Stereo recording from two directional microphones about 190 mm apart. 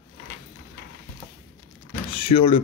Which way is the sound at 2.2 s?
30° left (ahead or behind).